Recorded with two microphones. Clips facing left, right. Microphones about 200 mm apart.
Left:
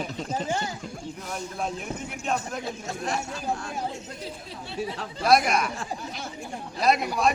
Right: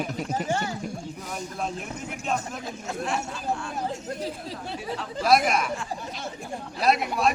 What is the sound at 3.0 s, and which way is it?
Speech, 40° left (ahead or behind).